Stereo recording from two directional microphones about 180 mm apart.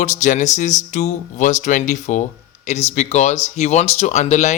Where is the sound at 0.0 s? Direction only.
45° left (ahead or behind).